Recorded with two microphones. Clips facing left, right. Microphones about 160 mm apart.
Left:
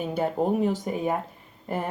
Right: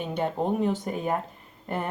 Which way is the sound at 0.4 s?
5° left (ahead or behind).